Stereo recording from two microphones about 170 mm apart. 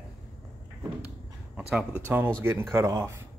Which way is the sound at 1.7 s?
5° right (ahead or behind).